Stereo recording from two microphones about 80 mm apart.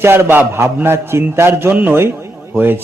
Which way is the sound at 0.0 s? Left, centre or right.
Right.